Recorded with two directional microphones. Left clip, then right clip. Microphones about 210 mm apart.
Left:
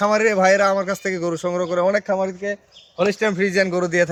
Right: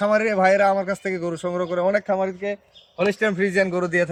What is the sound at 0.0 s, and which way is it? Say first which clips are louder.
A man's voice: left 2 dB; 25° left (ahead or behind).